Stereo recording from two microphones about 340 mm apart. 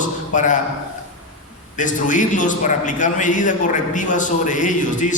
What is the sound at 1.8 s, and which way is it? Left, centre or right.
A man's voice, left.